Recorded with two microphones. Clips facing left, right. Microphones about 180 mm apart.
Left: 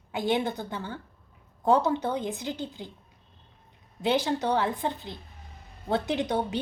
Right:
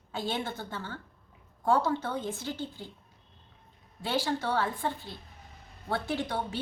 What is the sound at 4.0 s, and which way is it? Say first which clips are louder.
A woman's voice: left 5 dB; 20° left (ahead or behind).